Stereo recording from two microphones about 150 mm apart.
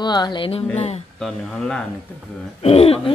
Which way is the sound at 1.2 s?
5° left (ahead or behind).